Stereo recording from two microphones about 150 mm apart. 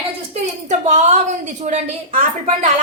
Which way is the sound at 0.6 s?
50° right (ahead or behind).